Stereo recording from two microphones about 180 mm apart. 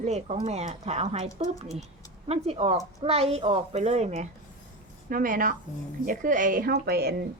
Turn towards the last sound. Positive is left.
turn(degrees=-65)  # may be behind; listen again after turning